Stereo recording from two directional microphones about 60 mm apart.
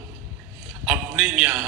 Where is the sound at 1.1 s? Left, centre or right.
Right.